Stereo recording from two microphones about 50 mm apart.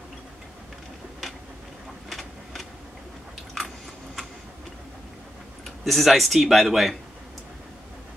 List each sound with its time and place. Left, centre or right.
2.0 s a sound: centre
3.5 s biting: centre
5.9 s speech: centre